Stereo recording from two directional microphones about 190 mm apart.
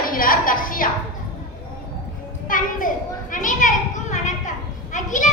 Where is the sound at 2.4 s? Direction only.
45° left (ahead or behind).